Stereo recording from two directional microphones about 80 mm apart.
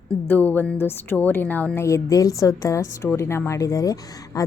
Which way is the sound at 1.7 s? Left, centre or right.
Left.